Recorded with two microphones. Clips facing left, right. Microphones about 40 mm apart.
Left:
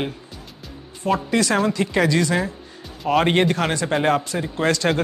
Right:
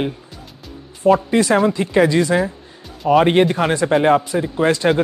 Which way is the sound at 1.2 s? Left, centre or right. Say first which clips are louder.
Right 4 dB; right.